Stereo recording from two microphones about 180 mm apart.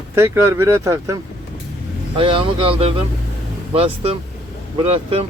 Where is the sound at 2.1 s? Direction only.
30° right (ahead or behind).